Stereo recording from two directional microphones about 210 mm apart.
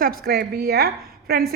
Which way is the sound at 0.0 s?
45° right (ahead or behind).